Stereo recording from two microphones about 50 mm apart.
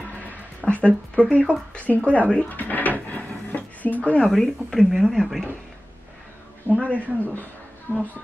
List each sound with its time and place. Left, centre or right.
0.7 s speech: left
2.5 s a sound: left
4.3 s speech: centre
6.8 s speech: left